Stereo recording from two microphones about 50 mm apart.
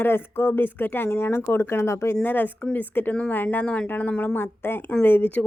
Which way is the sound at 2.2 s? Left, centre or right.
Left.